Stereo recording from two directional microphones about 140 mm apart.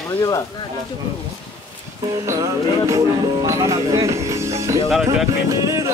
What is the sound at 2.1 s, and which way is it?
Speech, 25° right (ahead or behind).